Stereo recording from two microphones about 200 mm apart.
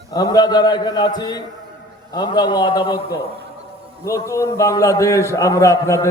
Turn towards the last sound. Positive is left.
turn(degrees=15)  # may be behind; listen again after turning